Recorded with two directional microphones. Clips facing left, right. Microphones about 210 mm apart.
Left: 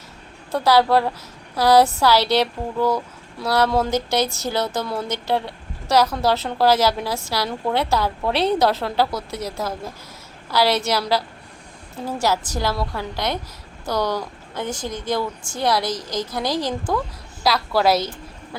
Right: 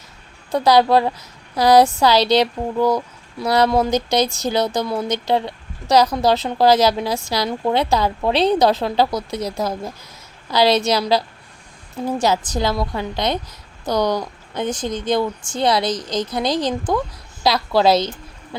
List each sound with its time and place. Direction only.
0.5 s a woman's voice: 15° right (ahead or behind)